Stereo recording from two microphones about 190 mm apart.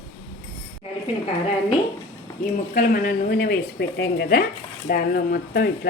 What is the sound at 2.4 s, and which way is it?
Speech, 50° left (ahead or behind).